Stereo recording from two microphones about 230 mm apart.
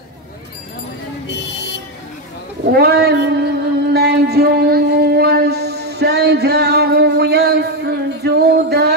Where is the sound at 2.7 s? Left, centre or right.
Right.